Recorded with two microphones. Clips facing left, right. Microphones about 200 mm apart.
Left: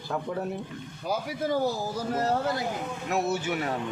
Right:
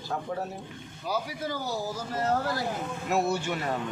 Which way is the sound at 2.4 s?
20° left (ahead or behind).